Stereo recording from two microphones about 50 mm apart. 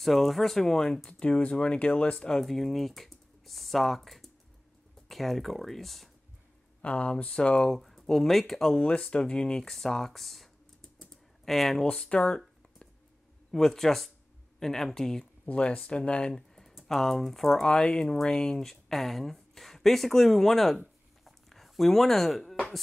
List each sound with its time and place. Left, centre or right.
0.0 s speech: centre
1.2 s speech: left
2.1 s speech: centre
6.8 s speech: left
7.5 s speech: centre
11.8 s speech: centre
13.5 s speech: centre
15.4 s speech: left
16.3 s a sound: centre
16.8 s speech: centre